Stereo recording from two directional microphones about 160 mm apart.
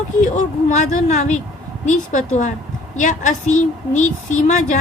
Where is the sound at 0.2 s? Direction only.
50° left (ahead or behind).